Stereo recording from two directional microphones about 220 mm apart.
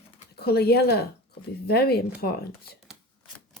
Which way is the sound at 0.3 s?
45° left (ahead or behind).